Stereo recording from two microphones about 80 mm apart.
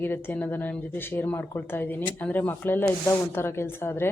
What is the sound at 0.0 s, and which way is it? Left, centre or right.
Speech, left.